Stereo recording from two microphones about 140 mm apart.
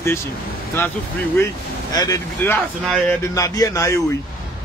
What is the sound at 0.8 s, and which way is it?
A man's voice, 15° left (ahead or behind).